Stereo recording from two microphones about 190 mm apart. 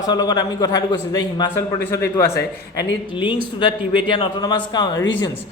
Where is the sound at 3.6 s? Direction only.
25° left (ahead or behind).